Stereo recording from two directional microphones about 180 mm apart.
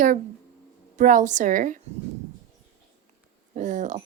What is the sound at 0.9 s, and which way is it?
Speech, 45° right (ahead or behind).